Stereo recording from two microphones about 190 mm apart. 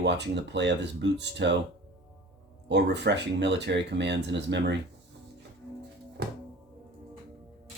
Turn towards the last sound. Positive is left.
turn(degrees=-55)  # may be behind; listen again after turning